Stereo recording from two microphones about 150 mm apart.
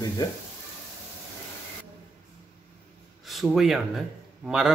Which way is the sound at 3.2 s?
Centre (ahead or behind).